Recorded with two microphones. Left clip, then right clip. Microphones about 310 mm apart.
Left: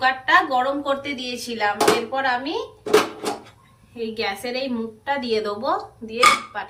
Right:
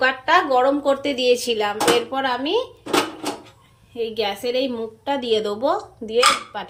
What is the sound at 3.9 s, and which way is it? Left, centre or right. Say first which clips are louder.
A woman's voice: right 3 dB; right.